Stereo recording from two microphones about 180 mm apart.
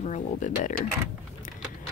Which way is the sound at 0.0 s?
45° left (ahead or behind).